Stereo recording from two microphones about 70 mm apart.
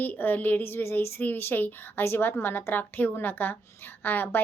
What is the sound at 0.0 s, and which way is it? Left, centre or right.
A woman's voice, left.